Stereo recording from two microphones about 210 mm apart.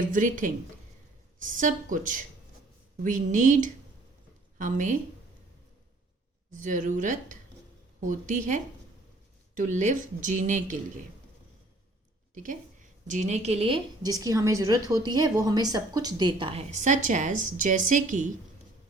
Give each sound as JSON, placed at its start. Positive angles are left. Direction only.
{"t": 0.1, "sound": "a woman's voice", "side_deg": -40}
{"t": 6.5, "sound": "speech", "side_deg": -35}
{"t": 12.3, "sound": "a woman's voice", "side_deg": -40}